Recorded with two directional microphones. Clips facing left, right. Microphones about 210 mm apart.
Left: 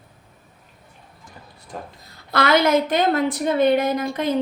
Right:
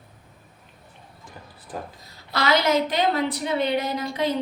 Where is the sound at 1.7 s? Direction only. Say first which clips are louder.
Right 1 dB; 5° right (ahead or behind).